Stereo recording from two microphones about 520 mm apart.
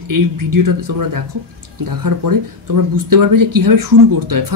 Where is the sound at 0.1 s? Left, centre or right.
Right.